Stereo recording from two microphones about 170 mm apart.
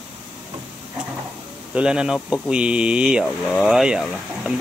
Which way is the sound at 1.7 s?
5° right (ahead or behind).